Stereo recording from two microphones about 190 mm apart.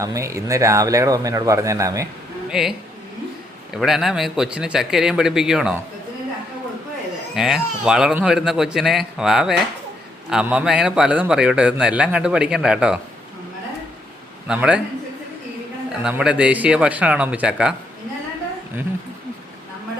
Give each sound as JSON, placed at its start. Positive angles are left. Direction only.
{"t": 0.0, "sound": "speech", "side_deg": -15}
{"t": 2.5, "sound": "speech", "side_deg": 0}
{"t": 3.8, "sound": "a man's voice", "side_deg": 0}
{"t": 7.3, "sound": "a man's voice", "side_deg": 0}
{"t": 14.4, "sound": "a man's voice", "side_deg": -5}
{"t": 15.9, "sound": "a man's voice", "side_deg": -5}